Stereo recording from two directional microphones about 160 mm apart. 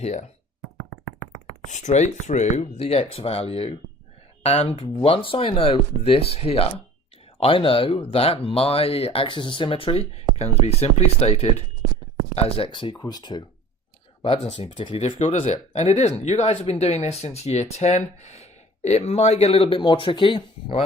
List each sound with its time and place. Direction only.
0.0 s speech: 45° left (ahead or behind)
1.7 s speech: 50° left (ahead or behind); by 13.4 s 25° left (ahead or behind)
14.4 s speech: 35° left (ahead or behind)